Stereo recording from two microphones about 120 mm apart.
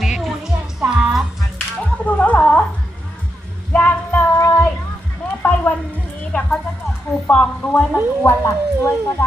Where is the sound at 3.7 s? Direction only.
15° left (ahead or behind).